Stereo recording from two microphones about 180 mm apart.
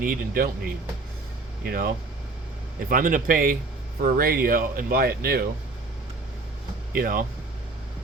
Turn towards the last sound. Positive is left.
turn(degrees=-50)  # may be behind; listen again after turning